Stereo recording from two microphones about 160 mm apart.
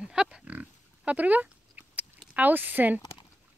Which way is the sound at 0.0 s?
5° right (ahead or behind).